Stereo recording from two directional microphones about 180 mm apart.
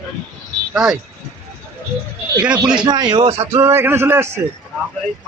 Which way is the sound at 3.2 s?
35° right (ahead or behind).